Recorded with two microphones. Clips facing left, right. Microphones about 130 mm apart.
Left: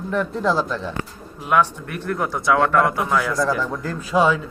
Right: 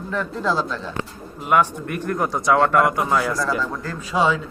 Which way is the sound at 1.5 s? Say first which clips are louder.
Even; 10° right (ahead or behind).